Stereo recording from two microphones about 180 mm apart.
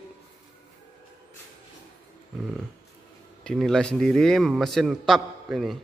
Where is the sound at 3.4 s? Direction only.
5° left (ahead or behind).